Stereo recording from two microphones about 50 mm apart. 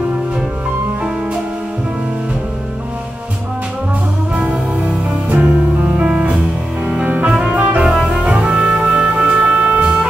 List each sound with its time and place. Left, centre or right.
4.4 s music: right
7.8 s music: centre